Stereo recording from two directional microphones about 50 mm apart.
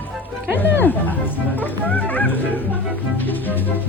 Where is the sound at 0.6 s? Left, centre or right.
Left.